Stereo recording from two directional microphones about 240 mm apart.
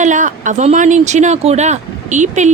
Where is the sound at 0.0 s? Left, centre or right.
Right.